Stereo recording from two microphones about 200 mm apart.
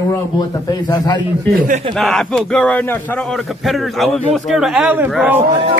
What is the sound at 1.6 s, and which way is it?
Speech, 40° right (ahead or behind).